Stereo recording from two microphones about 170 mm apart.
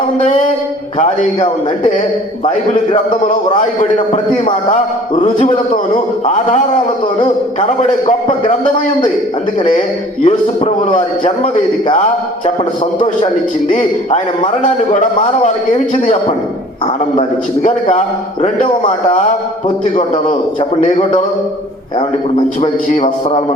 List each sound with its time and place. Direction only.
0.9 s a man's voice: 45° left (ahead or behind)
3.9 s a man's voice: 45° left (ahead or behind)
10.2 s a man's voice: 40° left (ahead or behind)
13.7 s a man's voice: 40° left (ahead or behind)
16.8 s a man's voice: 35° left (ahead or behind)
20.6 s a man's voice: 30° left (ahead or behind)
22.6 s a man's voice: 35° left (ahead or behind)